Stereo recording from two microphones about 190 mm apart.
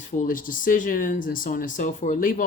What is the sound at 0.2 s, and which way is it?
Speech, 45° left (ahead or behind).